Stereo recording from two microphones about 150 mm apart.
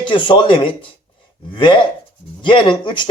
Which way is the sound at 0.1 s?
35° left (ahead or behind).